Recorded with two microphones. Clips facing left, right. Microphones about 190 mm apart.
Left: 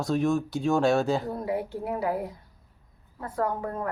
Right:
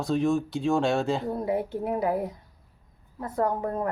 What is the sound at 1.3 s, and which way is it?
Speech, 25° right (ahead or behind).